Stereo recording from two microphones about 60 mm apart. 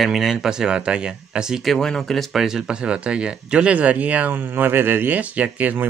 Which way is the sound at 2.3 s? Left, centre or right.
Centre.